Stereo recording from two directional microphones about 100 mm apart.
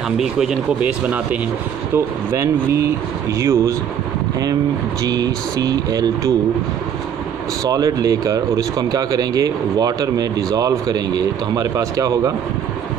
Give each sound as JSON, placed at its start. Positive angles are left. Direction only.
{"t": 0.2, "sound": "speech", "side_deg": -5}
{"t": 2.0, "sound": "speech", "side_deg": -30}
{"t": 5.0, "sound": "speech", "side_deg": -40}
{"t": 7.7, "sound": "speech", "side_deg": -35}